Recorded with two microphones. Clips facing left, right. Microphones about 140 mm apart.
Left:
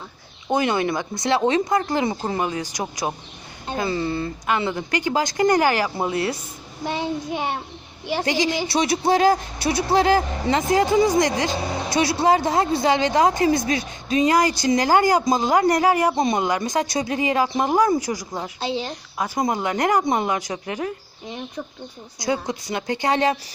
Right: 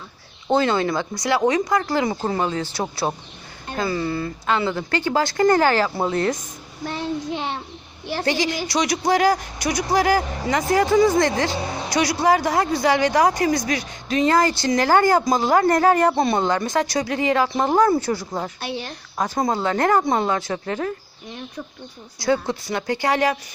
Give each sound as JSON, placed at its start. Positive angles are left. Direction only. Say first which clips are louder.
{"t": 0.5, "sound": "speech", "louder": "right 2 dB", "side_deg": 20}
{"t": 3.0, "sound": "speech", "louder": "right 2 dB", "side_deg": 0}
{"t": 3.7, "sound": "a woman's voice", "louder": "even", "side_deg": 25}
{"t": 6.8, "sound": "child singing", "louder": "left 2 dB", "side_deg": 15}
{"t": 7.3, "sound": "a woman's voice", "louder": "left 1 dB", "side_deg": 10}